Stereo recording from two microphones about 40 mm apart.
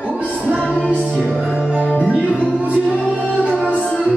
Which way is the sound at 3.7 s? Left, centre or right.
Left.